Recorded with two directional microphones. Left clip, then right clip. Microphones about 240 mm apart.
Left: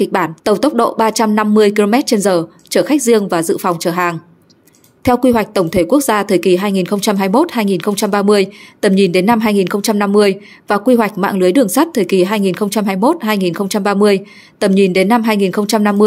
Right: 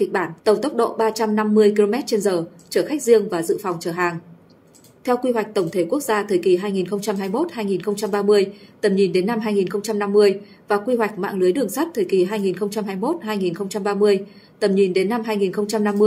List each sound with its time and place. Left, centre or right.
0.0 s a woman's voice: left